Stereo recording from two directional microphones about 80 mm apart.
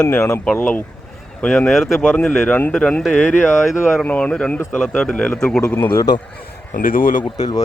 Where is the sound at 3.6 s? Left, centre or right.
Centre.